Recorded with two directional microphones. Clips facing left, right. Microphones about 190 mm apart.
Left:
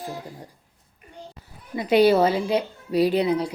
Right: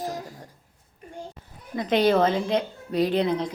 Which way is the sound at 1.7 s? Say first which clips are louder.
Left 3 dB; 10° left (ahead or behind).